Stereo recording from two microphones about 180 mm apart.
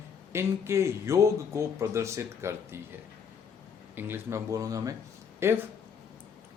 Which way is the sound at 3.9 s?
10° right (ahead or behind).